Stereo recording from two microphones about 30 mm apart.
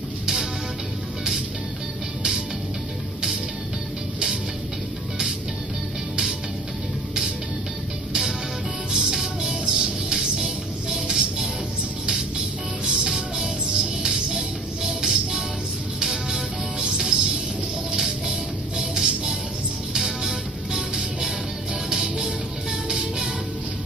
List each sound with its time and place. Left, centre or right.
8.1 s music: right